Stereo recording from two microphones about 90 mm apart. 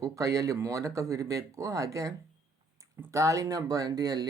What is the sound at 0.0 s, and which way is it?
Speech, 35° right (ahead or behind).